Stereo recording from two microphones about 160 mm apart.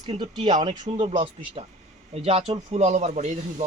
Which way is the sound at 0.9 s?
40° right (ahead or behind).